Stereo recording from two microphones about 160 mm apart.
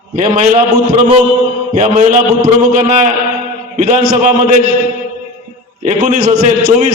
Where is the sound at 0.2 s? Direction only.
50° right (ahead or behind).